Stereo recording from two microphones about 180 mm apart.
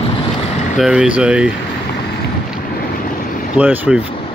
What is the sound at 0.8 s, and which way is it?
Speech, 5° right (ahead or behind).